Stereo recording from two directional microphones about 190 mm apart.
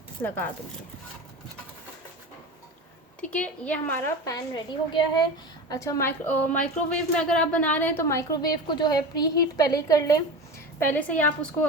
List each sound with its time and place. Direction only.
0.2 s a woman's voice: 10° left (ahead or behind)
3.2 s a woman's voice: 5° left (ahead or behind)
4.3 s a woman's voice: 20° left (ahead or behind)